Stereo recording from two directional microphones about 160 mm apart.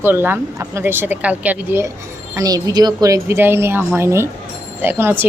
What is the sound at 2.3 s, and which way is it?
Speech, 20° right (ahead or behind).